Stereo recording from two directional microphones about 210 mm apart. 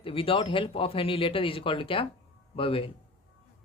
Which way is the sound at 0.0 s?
25° left (ahead or behind).